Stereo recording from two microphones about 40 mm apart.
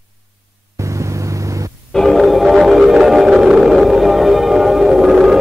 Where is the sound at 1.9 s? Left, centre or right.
Centre.